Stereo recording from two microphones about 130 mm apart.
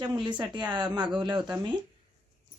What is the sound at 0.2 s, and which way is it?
Speech, 35° right (ahead or behind).